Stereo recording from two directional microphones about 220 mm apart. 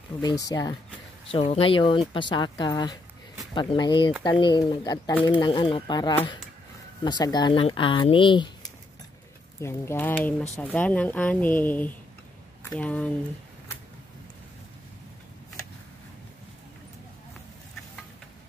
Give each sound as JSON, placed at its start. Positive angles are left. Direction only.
{"t": 0.2, "sound": "speech", "side_deg": 15}
{"t": 9.6, "sound": "speech", "side_deg": 10}